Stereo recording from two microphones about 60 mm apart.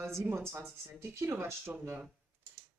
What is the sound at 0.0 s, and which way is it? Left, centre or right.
Speech, right.